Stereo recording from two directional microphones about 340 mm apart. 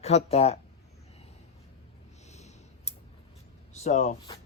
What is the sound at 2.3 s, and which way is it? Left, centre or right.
Clicking, centre.